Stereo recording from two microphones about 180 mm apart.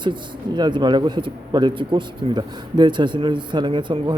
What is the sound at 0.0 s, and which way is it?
Speech, 25° right (ahead or behind).